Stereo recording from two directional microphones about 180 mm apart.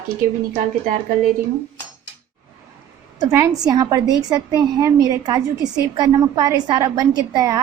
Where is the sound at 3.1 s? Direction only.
20° right (ahead or behind).